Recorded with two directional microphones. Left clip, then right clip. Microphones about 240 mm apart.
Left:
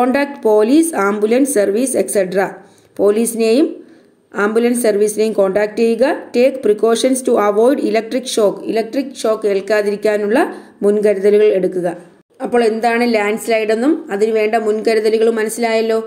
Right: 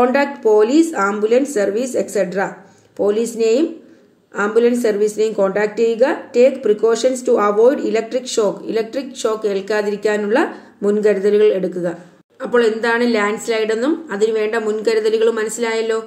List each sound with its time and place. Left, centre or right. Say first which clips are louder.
0.0 s a woman's voice: even; left